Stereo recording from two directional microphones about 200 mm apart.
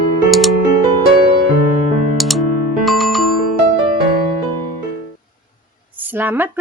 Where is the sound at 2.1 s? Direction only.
Centre (ahead or behind).